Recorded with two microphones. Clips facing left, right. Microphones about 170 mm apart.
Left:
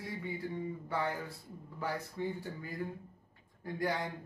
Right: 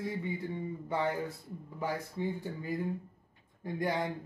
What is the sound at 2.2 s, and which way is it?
Speech, 15° right (ahead or behind).